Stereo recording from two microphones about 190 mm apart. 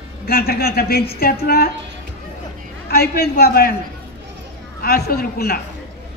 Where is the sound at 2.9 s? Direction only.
55° left (ahead or behind).